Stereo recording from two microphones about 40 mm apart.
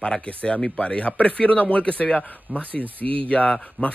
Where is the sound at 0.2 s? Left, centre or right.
Left.